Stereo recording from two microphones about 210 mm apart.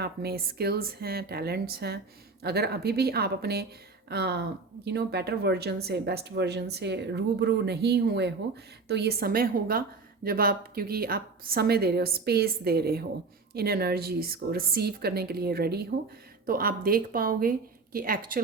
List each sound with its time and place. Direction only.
0.0 s speech: 50° right (ahead or behind)